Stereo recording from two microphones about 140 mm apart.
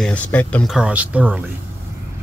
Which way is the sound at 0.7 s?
5° right (ahead or behind).